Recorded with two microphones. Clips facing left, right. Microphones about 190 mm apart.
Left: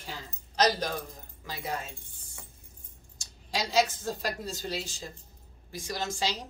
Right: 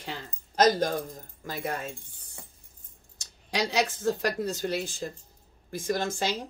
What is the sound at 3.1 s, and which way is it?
A woman's voice, 65° right (ahead or behind).